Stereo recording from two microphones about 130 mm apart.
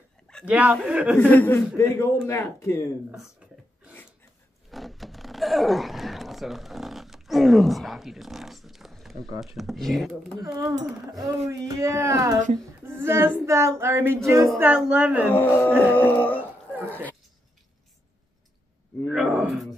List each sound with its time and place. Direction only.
0.5 s a woman's voice: 10° right (ahead or behind)
1.1 s music: 15° left (ahead or behind)
1.8 s speech: 20° left (ahead or behind)
4.6 s a sound: centre (ahead or behind)
9.6 s speech: centre (ahead or behind)
10.4 s child singing: 25° right (ahead or behind)
14.7 s a woman's voice: 10° right (ahead or behind)
15.3 s music: 15° left (ahead or behind)
19.1 s speech: 5° right (ahead or behind)